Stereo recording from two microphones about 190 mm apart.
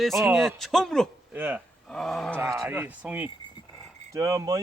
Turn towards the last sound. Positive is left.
turn(degrees=-20)  # may be behind; listen again after turning